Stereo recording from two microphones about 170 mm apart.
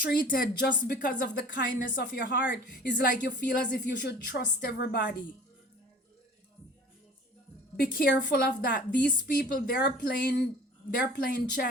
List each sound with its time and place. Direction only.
0.0 s speech: 55° left (ahead or behind)
1.5 s a woman's voice: 80° left
2.8 s a woman's voice: 60° left (ahead or behind); by 5.0 s 75° left (ahead or behind)
7.8 s speech: 65° left (ahead or behind)
11.2 s speech: 60° left (ahead or behind)